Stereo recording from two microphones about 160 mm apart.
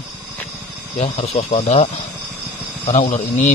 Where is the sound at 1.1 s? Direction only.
40° left (ahead or behind).